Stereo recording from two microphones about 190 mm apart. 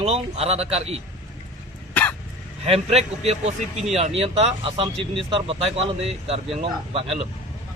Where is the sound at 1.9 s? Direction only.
10° left (ahead or behind).